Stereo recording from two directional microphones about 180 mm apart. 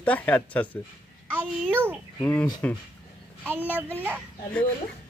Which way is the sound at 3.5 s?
10° right (ahead or behind).